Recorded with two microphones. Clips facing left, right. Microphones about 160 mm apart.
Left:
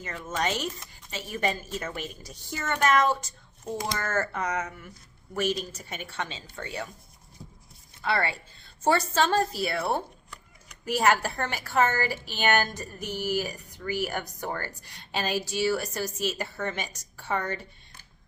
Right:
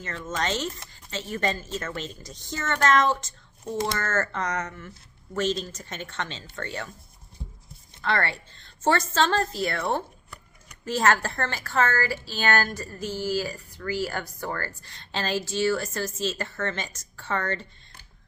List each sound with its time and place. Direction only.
0.0 s a woman's voice: 10° left (ahead or behind)
8.0 s a woman's voice: 10° left (ahead or behind)